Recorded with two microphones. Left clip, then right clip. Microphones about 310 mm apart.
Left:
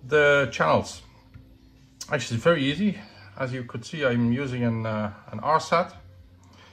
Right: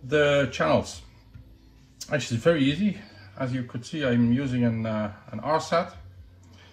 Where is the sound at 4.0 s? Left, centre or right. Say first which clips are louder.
Even; centre.